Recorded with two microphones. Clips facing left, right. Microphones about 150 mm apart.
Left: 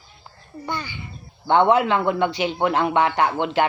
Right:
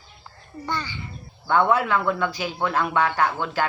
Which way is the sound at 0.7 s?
15° left (ahead or behind).